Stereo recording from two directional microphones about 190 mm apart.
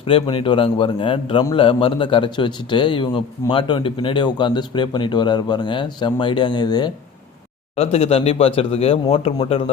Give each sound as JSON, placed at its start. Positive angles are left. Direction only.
{"t": 0.0, "sound": "a man's voice", "side_deg": 30}